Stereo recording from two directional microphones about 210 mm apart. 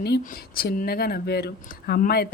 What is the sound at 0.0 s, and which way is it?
Speech, 50° left (ahead or behind).